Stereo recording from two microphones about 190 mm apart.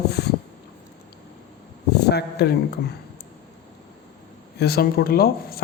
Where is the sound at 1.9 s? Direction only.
60° left (ahead or behind).